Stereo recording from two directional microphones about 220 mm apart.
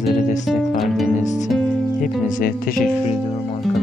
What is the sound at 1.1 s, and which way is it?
Music, 35° left (ahead or behind).